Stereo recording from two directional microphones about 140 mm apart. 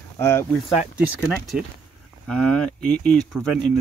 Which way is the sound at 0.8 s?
5° right (ahead or behind).